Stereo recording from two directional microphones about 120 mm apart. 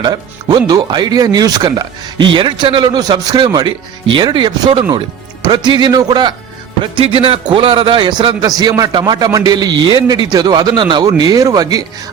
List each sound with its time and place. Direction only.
0.0 s speech: 35° right (ahead or behind)